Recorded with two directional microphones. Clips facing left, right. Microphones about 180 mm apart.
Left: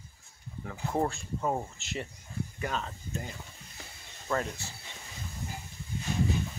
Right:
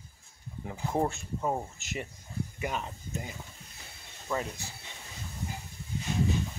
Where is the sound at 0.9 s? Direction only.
20° right (ahead or behind).